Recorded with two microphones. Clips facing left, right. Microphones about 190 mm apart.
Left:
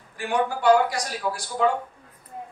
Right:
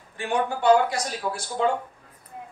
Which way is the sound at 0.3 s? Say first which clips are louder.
Even; 25° right (ahead or behind).